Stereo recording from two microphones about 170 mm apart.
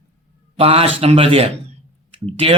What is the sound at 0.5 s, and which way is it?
Speech, 35° right (ahead or behind).